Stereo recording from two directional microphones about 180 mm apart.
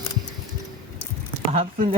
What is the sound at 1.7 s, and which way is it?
Speech, 50° right (ahead or behind).